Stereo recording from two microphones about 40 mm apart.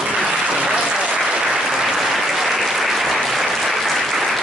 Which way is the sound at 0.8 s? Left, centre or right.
Centre.